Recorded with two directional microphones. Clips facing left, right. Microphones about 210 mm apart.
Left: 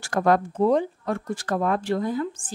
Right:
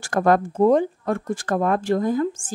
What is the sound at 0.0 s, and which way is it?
Speech, 50° right (ahead or behind).